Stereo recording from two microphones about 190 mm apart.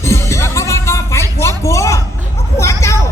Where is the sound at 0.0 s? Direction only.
15° left (ahead or behind).